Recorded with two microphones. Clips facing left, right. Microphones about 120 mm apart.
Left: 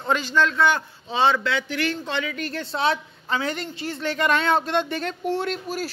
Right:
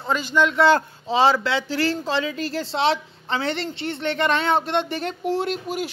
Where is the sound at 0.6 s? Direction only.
30° right (ahead or behind).